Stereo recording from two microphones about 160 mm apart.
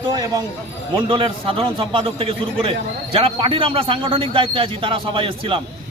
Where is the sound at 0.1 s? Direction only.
25° right (ahead or behind).